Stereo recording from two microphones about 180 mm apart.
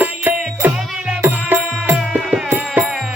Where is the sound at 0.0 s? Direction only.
10° right (ahead or behind).